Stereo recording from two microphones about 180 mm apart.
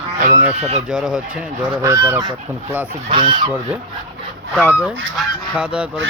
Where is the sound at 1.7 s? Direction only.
15° right (ahead or behind).